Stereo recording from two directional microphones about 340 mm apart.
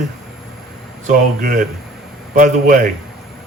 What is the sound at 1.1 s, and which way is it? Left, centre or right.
Speech, right.